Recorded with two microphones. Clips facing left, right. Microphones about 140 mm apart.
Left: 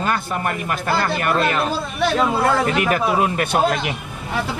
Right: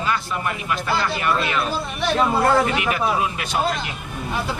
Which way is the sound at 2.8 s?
45° left (ahead or behind).